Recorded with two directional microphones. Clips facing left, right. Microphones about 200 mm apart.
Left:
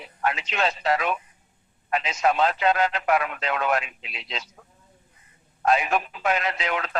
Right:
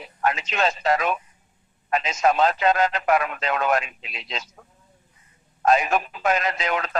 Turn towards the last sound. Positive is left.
turn(degrees=-40)  # may be behind; listen again after turning